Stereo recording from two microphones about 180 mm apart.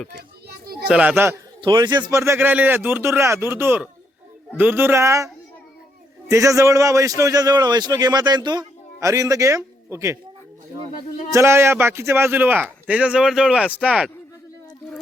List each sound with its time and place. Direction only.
0.1 s children playing: 60° right (ahead or behind)
0.9 s a man's voice: 5° right (ahead or behind)
1.6 s a man's voice: 25° right (ahead or behind)
11.3 s a man's voice: 15° right (ahead or behind)